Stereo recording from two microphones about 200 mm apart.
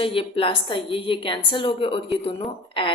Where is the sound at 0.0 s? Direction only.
25° left (ahead or behind).